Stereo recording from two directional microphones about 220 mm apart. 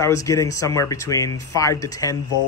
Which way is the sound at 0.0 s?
15° left (ahead or behind).